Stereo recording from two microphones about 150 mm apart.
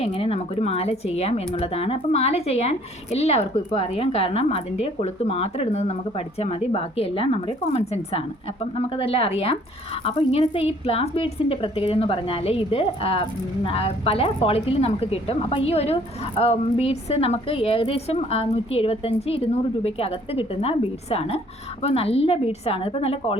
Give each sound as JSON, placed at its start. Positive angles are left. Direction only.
{"t": 0.0, "sound": "a woman's voice", "side_deg": 40}